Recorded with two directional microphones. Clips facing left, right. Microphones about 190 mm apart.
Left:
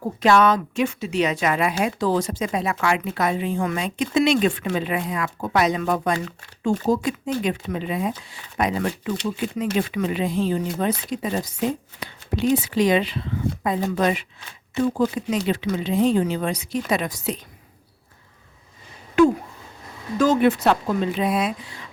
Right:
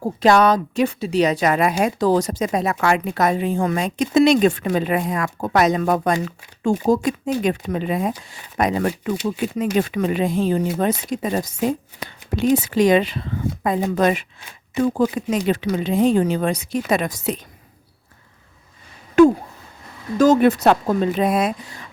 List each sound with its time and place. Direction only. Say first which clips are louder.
0.0 s speech: right 2 dB; 35° right (ahead or behind)
19.2 s speech: right 4 dB; 45° right (ahead or behind)